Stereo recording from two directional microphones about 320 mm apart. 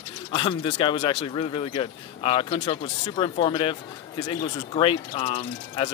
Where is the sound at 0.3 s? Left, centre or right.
Centre.